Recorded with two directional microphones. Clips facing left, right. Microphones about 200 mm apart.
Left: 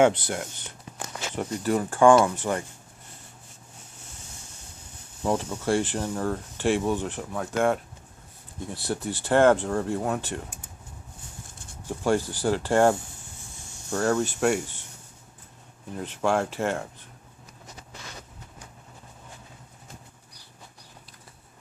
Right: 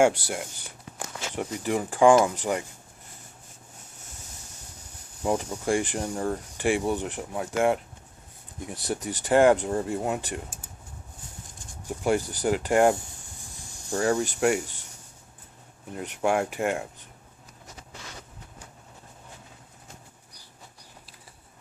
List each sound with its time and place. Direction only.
0.0 s speech: 10° right (ahead or behind)
5.2 s speech: 15° right (ahead or behind)
11.9 s speech: 15° right (ahead or behind)
16.0 s speech: 15° right (ahead or behind)